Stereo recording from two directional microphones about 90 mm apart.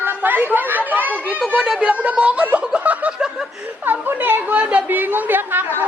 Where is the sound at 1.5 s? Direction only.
5° right (ahead or behind).